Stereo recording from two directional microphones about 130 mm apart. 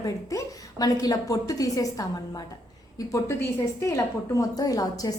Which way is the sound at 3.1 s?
25° left (ahead or behind).